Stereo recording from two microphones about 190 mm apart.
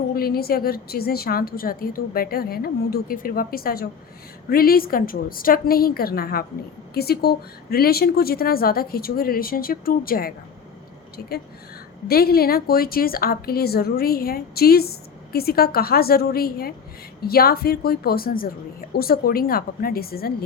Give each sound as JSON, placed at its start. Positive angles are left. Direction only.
{"t": 0.1, "sound": "a woman's voice", "side_deg": 55}